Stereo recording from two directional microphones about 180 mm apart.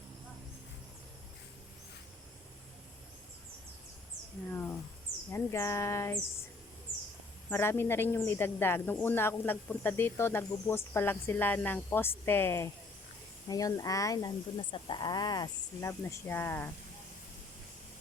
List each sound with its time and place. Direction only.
5.3 s speech: 15° left (ahead or behind)
7.5 s speech: 15° left (ahead or behind)